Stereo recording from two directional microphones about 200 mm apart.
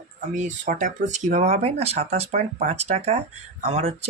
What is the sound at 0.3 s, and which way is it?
Speech, 40° right (ahead or behind).